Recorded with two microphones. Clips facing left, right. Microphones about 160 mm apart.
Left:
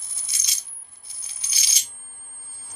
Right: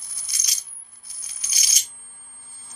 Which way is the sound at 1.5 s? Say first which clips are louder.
Right 1 dB; 30° left (ahead or behind).